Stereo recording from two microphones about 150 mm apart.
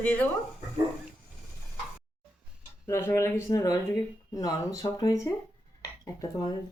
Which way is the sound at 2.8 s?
15° left (ahead or behind).